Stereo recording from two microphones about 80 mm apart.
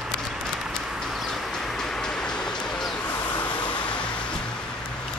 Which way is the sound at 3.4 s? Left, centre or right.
Centre.